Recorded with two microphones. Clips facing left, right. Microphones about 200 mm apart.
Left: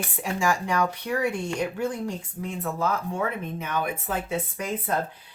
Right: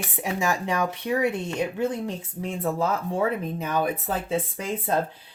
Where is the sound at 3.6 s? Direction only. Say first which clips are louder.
Right 3 dB; 35° right (ahead or behind).